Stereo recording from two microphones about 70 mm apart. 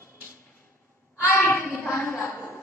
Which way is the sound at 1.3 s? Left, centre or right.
Left.